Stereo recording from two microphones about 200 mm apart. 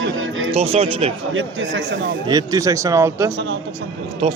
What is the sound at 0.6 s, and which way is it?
Speech, 30° right (ahead or behind).